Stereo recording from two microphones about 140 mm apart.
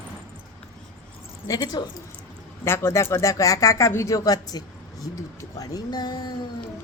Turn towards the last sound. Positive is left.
turn(degrees=30)  # may be behind; listen again after turning